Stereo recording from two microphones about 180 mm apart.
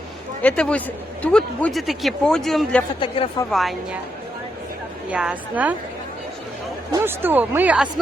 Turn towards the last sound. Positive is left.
turn(degrees=-5)  # may be behind; listen again after turning